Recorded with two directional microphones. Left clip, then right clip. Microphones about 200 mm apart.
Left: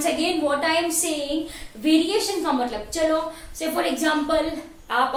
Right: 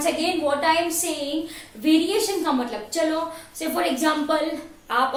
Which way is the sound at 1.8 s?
Centre (ahead or behind).